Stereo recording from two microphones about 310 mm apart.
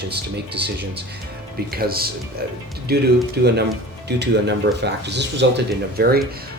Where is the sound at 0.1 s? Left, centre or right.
Right.